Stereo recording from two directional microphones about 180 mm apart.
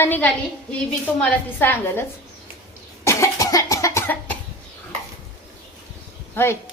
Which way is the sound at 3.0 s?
15° left (ahead or behind).